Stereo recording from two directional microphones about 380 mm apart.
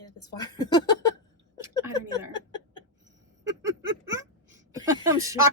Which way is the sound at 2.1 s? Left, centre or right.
Centre.